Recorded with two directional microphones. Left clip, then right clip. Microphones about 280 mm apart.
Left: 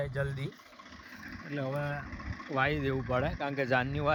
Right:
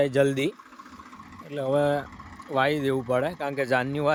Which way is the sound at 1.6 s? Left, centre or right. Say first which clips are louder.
Right 12 dB; right.